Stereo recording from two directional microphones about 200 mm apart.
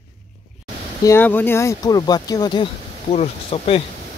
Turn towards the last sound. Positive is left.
turn(degrees=30)  # may be behind; listen again after turning